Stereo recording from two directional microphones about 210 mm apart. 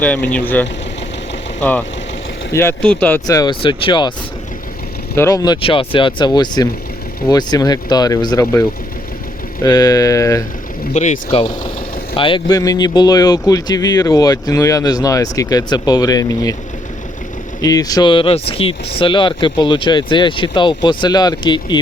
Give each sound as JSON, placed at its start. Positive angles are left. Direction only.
{"t": 0.0, "sound": "speech", "side_deg": 5}
{"t": 2.5, "sound": "speech", "side_deg": 10}
{"t": 5.1, "sound": "speech", "side_deg": 15}
{"t": 9.6, "sound": "speech", "side_deg": 15}
{"t": 10.9, "sound": "speech", "side_deg": 30}
{"t": 17.6, "sound": "speech", "side_deg": 15}